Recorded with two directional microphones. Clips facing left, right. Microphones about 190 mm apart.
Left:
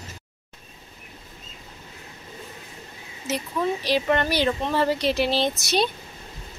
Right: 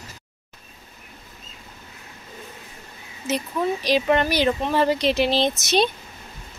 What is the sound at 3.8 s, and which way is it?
Speech, 15° right (ahead or behind).